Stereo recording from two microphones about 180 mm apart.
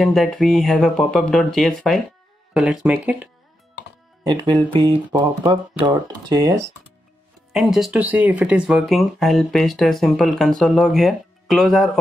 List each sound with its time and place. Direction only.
0.0 s speech: centre (ahead or behind)
4.3 s speech: 25° right (ahead or behind)
7.5 s speech: centre (ahead or behind)